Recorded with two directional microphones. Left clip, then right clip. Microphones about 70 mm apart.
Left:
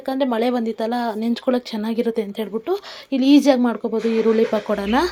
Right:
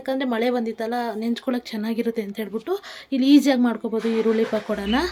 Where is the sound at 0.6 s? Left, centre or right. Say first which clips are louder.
Left 3 dB; left.